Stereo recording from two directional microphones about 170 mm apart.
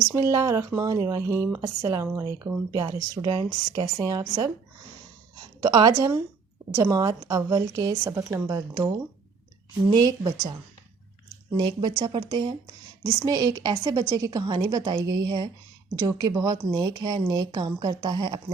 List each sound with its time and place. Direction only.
0.1 s speech: 20° right (ahead or behind)
5.6 s speech: 20° right (ahead or behind)
9.9 s speech: 25° right (ahead or behind)
11.5 s speech: 25° right (ahead or behind)